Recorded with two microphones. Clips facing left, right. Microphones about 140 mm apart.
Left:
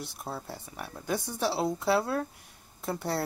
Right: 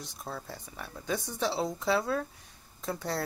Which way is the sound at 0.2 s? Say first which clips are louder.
Even; 10° left (ahead or behind).